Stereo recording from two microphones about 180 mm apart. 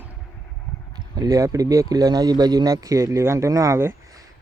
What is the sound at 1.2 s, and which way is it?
A man's voice, 20° right (ahead or behind).